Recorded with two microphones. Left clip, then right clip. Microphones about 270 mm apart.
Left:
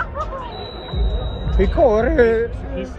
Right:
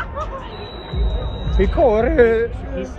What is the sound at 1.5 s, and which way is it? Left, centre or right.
Speech, right.